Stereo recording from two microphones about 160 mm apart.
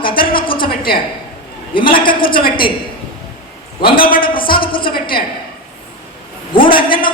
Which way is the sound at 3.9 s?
65° left (ahead or behind).